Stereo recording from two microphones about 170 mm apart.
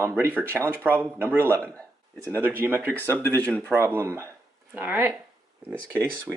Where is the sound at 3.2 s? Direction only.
10° left (ahead or behind).